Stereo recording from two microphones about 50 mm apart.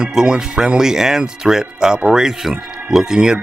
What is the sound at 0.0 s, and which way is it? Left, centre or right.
Speech, centre.